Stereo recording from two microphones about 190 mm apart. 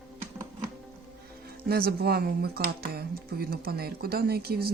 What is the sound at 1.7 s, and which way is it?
Speech, 55° right (ahead or behind).